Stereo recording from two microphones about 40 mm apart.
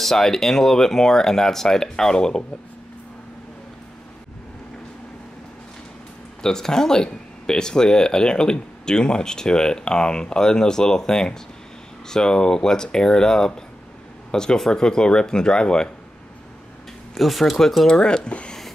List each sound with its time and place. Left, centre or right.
0.0 s speech: centre
6.4 s speech: centre
17.1 s speech: centre
17.8 s speech: centre